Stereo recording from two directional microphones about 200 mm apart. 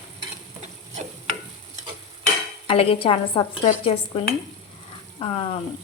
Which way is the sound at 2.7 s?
25° left (ahead or behind).